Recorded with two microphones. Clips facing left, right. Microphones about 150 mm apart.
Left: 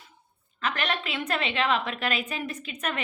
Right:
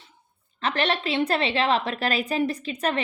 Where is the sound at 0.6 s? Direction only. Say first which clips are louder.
Right 5 dB; 30° right (ahead or behind).